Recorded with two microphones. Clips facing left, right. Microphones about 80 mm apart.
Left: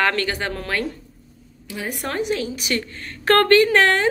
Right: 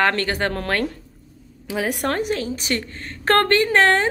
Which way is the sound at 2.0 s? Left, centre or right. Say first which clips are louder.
Left 3 dB; right.